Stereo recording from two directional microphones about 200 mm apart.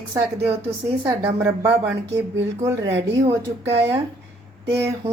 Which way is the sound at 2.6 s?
15° right (ahead or behind).